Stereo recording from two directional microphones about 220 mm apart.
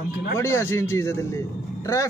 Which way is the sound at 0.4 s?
10° left (ahead or behind).